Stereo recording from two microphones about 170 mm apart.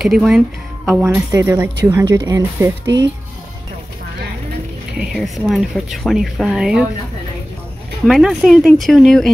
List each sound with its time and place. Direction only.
0.0 s speech: centre (ahead or behind)
1.0 s speech: 15° right (ahead or behind)
4.9 s speech: centre (ahead or behind)
8.0 s speech: centre (ahead or behind)